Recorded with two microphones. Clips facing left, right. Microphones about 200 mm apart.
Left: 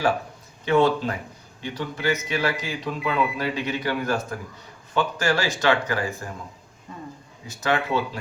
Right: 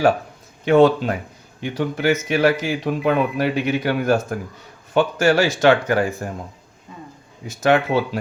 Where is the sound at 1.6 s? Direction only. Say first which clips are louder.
Right 6 dB; 50° right (ahead or behind).